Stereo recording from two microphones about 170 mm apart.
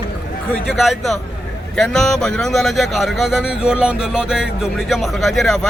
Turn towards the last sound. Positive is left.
turn(degrees=0)  # may be behind; listen again after turning